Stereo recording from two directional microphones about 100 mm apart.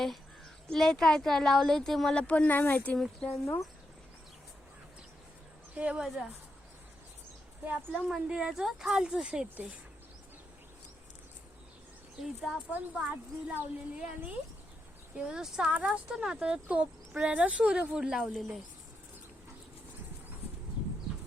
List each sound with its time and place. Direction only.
0.7 s speech: 5° left (ahead or behind)
3.2 s speech: 30° left (ahead or behind)
5.7 s speech: 10° right (ahead or behind)
8.0 s speech: 5° right (ahead or behind)
12.2 s speech: centre (ahead or behind)
12.7 s speech: 15° right (ahead or behind)